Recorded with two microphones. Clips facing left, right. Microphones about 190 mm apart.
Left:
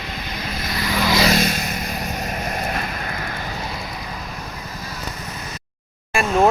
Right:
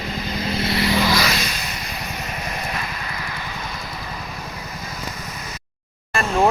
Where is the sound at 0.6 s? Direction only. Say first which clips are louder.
Right 5 dB; 30° right (ahead or behind).